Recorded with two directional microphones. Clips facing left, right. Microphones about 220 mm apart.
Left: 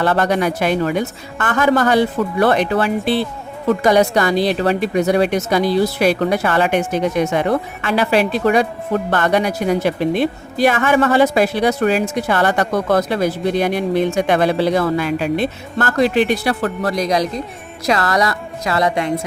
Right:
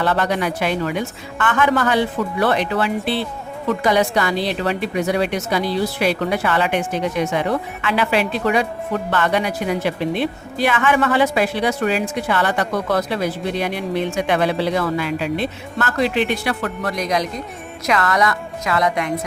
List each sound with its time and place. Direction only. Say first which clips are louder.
0.0 s a woman's voice: left 3 dB; 45° left (ahead or behind); by 19.1 s 30° left (ahead or behind)